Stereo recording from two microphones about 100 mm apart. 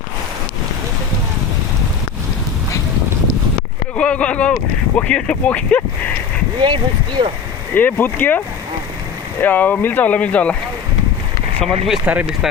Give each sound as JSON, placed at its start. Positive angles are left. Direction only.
{"t": 3.9, "sound": "speech", "side_deg": 10}
{"t": 6.6, "sound": "speech", "side_deg": -50}
{"t": 7.7, "sound": "speech", "side_deg": 15}
{"t": 9.4, "sound": "speech", "side_deg": 15}
{"t": 12.0, "sound": "speech", "side_deg": -10}